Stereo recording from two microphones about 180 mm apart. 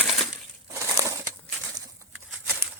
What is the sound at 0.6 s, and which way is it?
Crushing, 15° right (ahead or behind).